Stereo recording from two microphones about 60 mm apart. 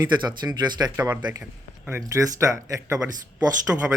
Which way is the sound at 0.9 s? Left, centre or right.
Right.